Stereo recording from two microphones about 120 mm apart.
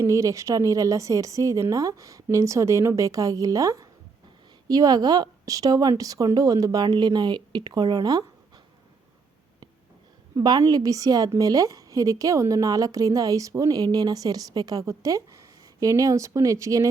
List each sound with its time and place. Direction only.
0.0 s a woman's voice: 25° right (ahead or behind)
10.3 s a woman's voice: 30° right (ahead or behind)